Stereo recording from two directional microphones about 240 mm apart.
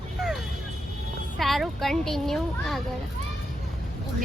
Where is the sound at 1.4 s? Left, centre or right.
Centre.